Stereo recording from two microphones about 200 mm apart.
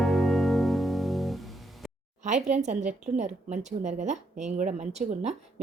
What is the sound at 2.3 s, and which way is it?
A woman's voice, 35° right (ahead or behind).